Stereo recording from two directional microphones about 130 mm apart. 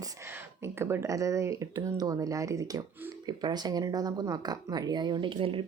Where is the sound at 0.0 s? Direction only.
20° right (ahead or behind).